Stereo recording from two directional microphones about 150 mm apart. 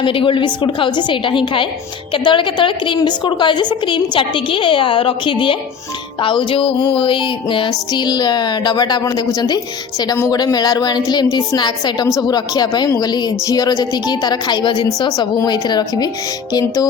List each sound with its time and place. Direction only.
0.0 s a woman's voice: 35° left (ahead or behind)
6.2 s music: 35° left (ahead or behind)